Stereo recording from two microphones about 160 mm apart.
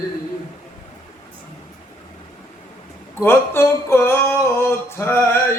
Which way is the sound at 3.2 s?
15° left (ahead or behind).